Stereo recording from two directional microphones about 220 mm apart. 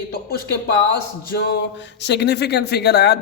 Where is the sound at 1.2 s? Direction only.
45° left (ahead or behind).